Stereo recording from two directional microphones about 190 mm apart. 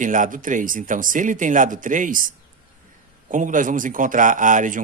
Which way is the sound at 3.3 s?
40° right (ahead or behind).